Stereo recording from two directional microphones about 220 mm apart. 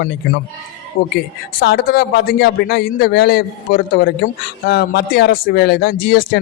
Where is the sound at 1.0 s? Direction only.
40° left (ahead or behind).